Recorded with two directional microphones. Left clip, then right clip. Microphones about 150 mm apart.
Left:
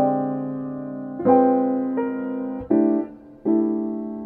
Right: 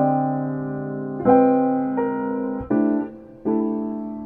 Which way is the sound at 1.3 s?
55° left (ahead or behind).